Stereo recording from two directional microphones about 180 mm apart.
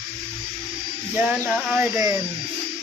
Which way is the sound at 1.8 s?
20° right (ahead or behind).